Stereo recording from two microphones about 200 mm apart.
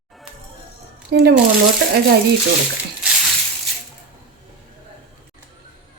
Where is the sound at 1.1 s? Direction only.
55° right (ahead or behind).